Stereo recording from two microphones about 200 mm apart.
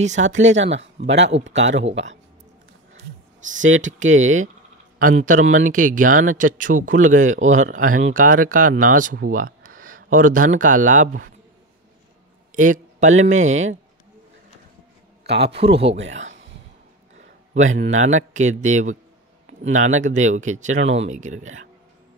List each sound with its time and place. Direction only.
0.0 s a man's voice: 35° right (ahead or behind)
0.6 s speech: 65° right (ahead or behind)
3.5 s speech: 75° right (ahead or behind)
4.2 s a man's voice: 35° right (ahead or behind)
12.5 s speech: 40° right (ahead or behind)
15.2 s speech: 55° right (ahead or behind)
15.5 s speech: 30° right (ahead or behind)
17.7 s a man's voice: 35° right (ahead or behind)